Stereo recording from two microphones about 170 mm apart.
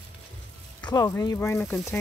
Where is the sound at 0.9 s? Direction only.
25° left (ahead or behind).